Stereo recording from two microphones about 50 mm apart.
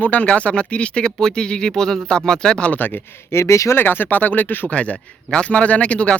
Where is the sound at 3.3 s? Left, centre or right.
Left.